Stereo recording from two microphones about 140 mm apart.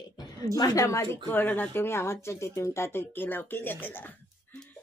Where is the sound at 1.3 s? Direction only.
15° left (ahead or behind).